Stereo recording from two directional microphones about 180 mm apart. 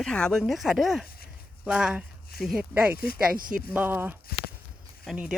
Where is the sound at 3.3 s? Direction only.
50° right (ahead or behind).